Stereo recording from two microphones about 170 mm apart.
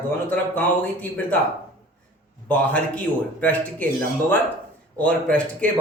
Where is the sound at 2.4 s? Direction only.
10° left (ahead or behind).